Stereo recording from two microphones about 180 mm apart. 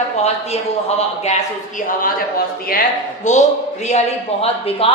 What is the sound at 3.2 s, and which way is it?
A woman's voice, 40° left (ahead or behind).